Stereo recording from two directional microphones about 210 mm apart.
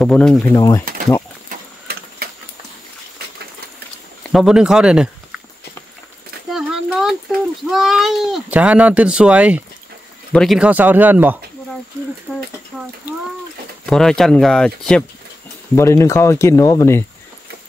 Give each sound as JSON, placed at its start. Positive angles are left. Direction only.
{"t": 0.0, "sound": "speech", "side_deg": 0}
{"t": 0.6, "sound": "speech", "side_deg": 20}
{"t": 1.5, "sound": "printer", "side_deg": -45}
{"t": 4.2, "sound": "speech", "side_deg": 0}
{"t": 6.5, "sound": "a sound", "side_deg": -5}
{"t": 7.6, "sound": "speech", "side_deg": 0}
{"t": 13.8, "sound": "speech", "side_deg": 0}